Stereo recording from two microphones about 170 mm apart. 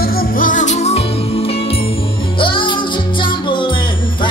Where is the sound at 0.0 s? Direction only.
60° left (ahead or behind).